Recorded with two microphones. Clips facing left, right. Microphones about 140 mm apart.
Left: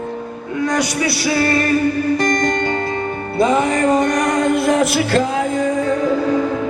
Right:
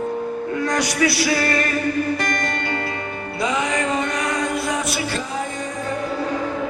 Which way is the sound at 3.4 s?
50° left (ahead or behind).